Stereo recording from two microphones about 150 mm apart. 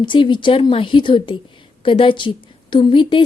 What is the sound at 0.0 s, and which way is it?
A woman's voice, 35° left (ahead or behind).